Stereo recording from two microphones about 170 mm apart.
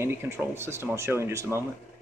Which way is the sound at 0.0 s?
15° right (ahead or behind).